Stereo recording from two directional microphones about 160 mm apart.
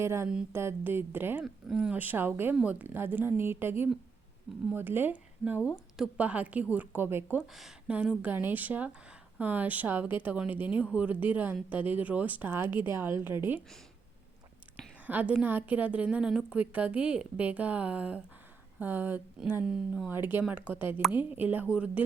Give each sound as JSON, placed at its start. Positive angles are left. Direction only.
{"t": 0.0, "sound": "a woman's voice", "side_deg": -15}
{"t": 15.0, "sound": "a woman's voice", "side_deg": -10}